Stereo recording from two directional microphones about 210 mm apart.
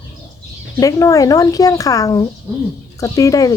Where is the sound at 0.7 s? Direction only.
15° left (ahead or behind).